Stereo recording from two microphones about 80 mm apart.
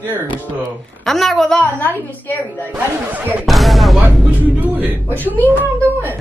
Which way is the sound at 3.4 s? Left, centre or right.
Centre.